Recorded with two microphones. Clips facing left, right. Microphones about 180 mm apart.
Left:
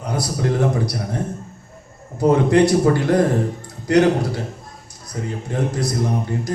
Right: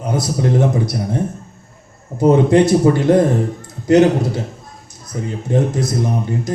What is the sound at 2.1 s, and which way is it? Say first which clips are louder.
Speech: right 3 dB; 20° right (ahead or behind).